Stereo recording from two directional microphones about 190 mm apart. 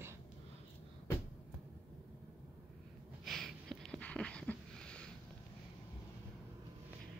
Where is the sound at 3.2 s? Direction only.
Centre (ahead or behind).